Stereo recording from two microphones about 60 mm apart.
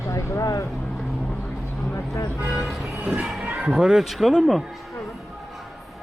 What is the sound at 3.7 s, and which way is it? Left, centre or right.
Speech, centre.